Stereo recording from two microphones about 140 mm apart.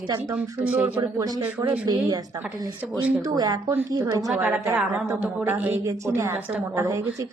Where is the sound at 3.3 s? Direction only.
30° right (ahead or behind).